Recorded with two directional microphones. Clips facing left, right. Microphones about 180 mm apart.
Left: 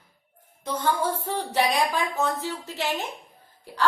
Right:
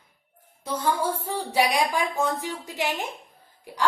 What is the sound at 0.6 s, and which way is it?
A woman's voice, 10° right (ahead or behind).